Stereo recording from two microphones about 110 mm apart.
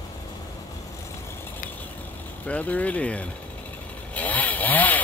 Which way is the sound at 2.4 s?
10° left (ahead or behind).